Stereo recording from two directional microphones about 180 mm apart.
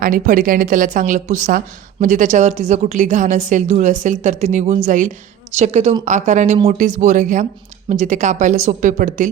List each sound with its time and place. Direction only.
0.0 s a woman's voice: 50° right (ahead or behind)